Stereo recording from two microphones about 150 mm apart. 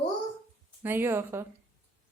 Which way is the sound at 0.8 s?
15° right (ahead or behind).